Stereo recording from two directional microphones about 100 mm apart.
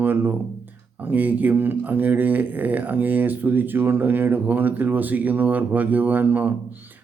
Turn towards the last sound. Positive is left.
turn(degrees=-20)  # may be behind; listen again after turning